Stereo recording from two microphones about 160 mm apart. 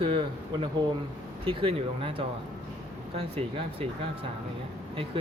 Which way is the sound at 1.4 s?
35° right (ahead or behind).